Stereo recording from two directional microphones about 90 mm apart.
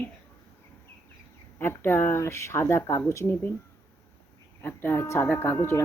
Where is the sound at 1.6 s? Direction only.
25° left (ahead or behind).